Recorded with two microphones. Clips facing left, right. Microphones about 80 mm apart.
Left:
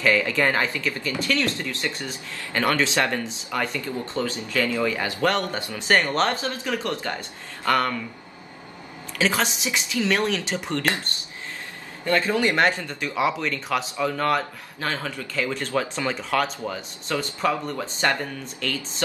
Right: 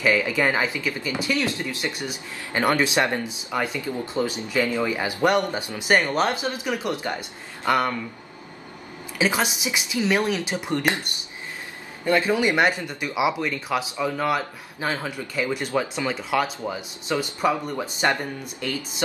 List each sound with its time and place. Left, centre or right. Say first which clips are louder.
0.0 s speech: even; centre
9.2 s speech: even; centre